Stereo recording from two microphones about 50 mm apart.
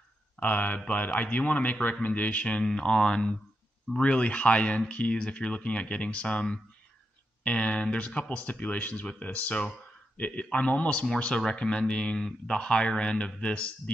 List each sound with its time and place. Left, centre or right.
0.4 s speech: left
2.6 s speech: centre; by 9.0 s left
10.1 s speech: left